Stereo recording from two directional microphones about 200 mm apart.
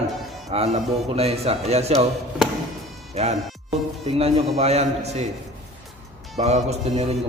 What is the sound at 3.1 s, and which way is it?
Speech, 30° right (ahead or behind).